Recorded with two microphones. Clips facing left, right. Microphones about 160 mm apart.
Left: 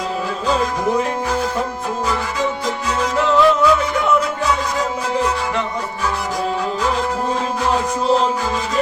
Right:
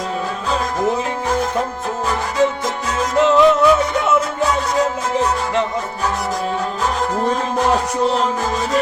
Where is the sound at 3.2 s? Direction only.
20° right (ahead or behind).